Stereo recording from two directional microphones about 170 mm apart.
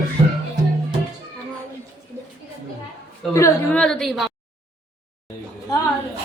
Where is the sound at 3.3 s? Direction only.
15° left (ahead or behind).